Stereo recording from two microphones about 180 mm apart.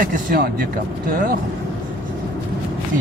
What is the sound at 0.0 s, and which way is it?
Speech, 55° right (ahead or behind).